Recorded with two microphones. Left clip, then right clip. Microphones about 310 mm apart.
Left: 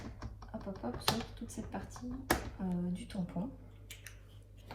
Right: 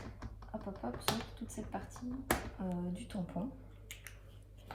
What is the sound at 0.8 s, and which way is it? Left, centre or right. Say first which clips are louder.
Speech: left 3 dB; centre.